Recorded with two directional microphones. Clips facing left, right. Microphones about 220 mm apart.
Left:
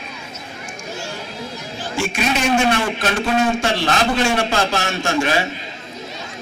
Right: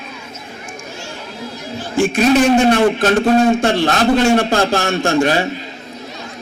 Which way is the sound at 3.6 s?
55° right (ahead or behind).